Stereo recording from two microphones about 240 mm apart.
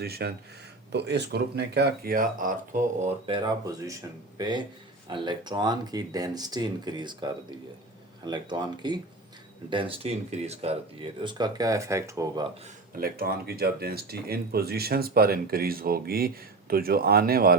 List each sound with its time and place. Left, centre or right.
0.0 s speech: right; by 12.5 s centre
13.0 s speech: right